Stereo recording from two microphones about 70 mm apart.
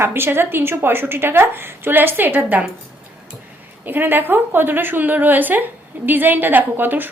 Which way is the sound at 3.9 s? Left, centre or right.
Right.